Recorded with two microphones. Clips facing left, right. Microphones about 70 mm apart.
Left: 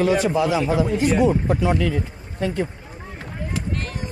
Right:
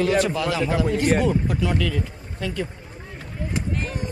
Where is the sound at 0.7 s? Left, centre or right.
Right.